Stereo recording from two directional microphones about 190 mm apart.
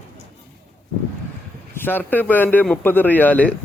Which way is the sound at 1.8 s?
10° left (ahead or behind).